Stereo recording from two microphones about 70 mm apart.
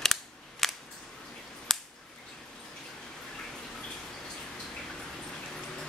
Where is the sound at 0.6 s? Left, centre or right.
Centre.